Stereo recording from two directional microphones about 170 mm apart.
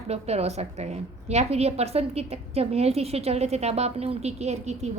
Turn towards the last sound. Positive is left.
turn(degrees=-40)  # may be behind; listen again after turning